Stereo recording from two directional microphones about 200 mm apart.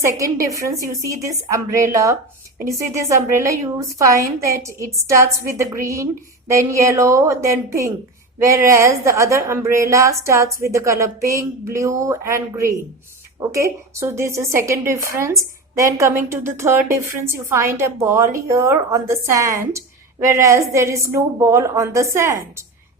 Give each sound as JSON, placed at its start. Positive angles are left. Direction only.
{"t": 0.0, "sound": "a woman's voice", "side_deg": -15}